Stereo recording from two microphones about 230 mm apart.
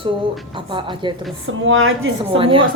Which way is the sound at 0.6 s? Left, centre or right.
Right.